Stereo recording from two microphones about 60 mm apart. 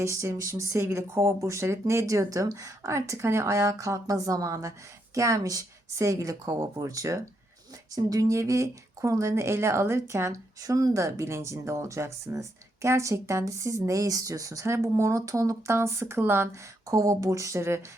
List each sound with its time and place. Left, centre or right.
0.0 s speech: right
7.9 s speech: right
16.5 s speech: right